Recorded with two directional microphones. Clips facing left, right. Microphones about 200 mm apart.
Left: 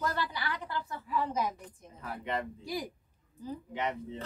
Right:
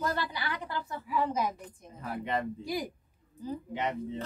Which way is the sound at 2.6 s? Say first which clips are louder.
Right 3 dB; 15° right (ahead or behind).